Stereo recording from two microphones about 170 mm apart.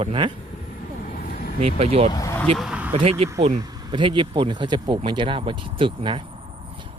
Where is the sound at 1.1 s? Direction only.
60° left (ahead or behind).